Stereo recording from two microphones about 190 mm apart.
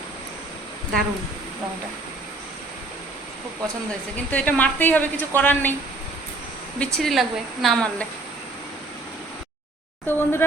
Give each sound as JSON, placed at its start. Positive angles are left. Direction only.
{"t": 4.3, "sound": "a woman's voice", "side_deg": 10}
{"t": 6.7, "sound": "speech", "side_deg": 0}
{"t": 10.1, "sound": "a woman's voice", "side_deg": 10}